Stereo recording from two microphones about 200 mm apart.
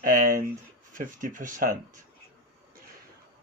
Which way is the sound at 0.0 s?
45° right (ahead or behind).